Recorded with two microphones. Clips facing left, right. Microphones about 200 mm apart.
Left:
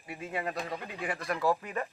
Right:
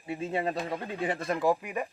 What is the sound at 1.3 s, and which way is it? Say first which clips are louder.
Speech: right 1 dB; 15° right (ahead or behind).